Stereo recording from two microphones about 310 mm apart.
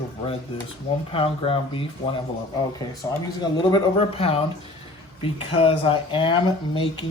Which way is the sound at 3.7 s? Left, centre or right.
Centre.